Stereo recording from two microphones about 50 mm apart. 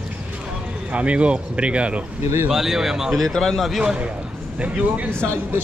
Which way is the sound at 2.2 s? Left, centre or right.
Right.